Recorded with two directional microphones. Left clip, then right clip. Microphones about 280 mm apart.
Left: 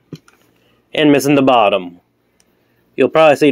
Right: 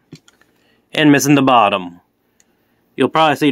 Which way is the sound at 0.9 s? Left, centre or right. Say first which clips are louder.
Even; right.